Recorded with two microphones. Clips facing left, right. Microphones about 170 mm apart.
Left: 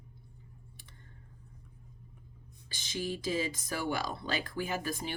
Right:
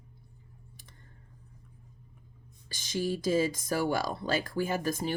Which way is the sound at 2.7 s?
45° right (ahead or behind).